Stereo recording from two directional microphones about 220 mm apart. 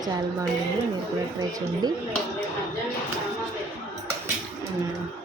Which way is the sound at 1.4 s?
15° right (ahead or behind).